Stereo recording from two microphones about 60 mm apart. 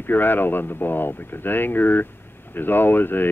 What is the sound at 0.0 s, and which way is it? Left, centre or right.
Speech, left.